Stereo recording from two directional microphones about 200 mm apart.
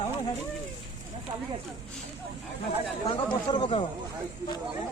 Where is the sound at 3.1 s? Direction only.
25° left (ahead or behind).